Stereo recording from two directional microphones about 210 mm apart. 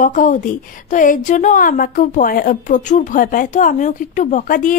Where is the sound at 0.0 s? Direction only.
40° left (ahead or behind).